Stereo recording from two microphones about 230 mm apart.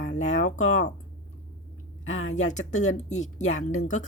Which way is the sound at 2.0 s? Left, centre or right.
Left.